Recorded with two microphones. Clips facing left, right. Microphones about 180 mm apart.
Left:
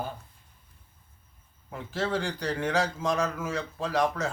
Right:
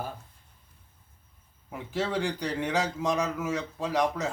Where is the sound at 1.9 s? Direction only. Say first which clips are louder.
Right 1 dB; 15° right (ahead or behind).